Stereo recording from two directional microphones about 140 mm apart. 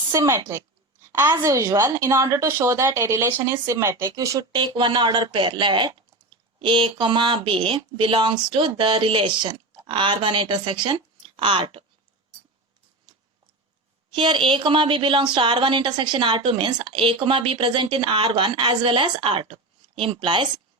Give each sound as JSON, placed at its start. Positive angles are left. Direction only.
{"t": 0.1, "sound": "a woman's voice", "side_deg": -20}
{"t": 14.1, "sound": "a woman's voice", "side_deg": -35}